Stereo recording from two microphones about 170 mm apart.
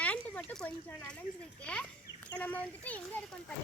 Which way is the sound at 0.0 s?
10° left (ahead or behind).